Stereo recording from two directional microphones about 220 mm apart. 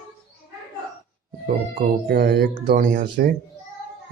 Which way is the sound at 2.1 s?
45° right (ahead or behind).